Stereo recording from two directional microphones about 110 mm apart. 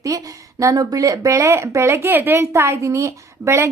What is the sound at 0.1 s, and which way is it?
A woman's voice, 30° right (ahead or behind).